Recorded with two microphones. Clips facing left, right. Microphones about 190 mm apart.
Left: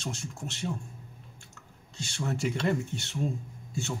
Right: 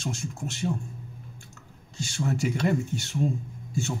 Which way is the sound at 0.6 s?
25° right (ahead or behind).